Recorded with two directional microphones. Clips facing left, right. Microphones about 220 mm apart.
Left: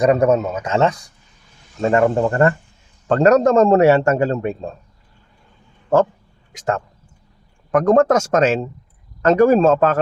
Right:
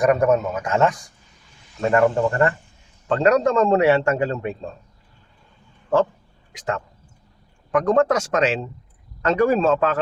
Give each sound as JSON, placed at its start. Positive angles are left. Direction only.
{"t": 0.0, "sound": "speech", "side_deg": 20}
{"t": 2.2, "sound": "a man's voice", "side_deg": 45}
{"t": 6.5, "sound": "a man's voice", "side_deg": 45}